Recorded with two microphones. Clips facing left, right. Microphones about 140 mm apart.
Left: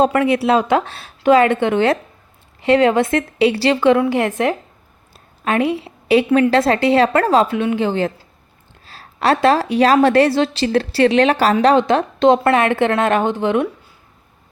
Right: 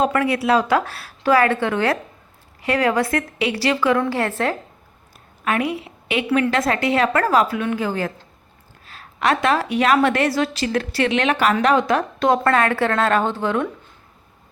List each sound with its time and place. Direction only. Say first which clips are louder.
0.0 s speech: left 4 dB; 25° left (ahead or behind)
5.5 s a woman's voice: left 4 dB; 30° left (ahead or behind)